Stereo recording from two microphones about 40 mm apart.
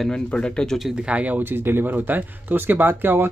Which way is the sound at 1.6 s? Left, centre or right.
Right.